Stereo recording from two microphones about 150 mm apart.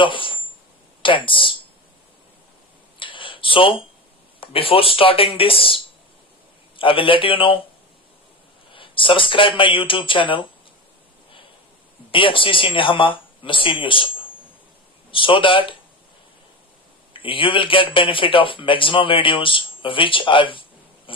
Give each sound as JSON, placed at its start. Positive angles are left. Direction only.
{"t": 0.0, "sound": "a sound", "side_deg": 35}
{"t": 1.0, "sound": "a man's voice", "side_deg": 35}
{"t": 3.0, "sound": "a sound", "side_deg": 35}
{"t": 4.4, "sound": "a man's voice", "side_deg": 35}
{"t": 8.7, "sound": "speech", "side_deg": 35}
{"t": 12.1, "sound": "a man's voice", "side_deg": 35}
{"t": 15.1, "sound": "a man's voice", "side_deg": 35}
{"t": 17.2, "sound": "a man's voice", "side_deg": 35}